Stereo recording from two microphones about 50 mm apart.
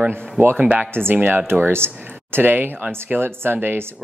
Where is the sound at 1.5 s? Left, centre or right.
Right.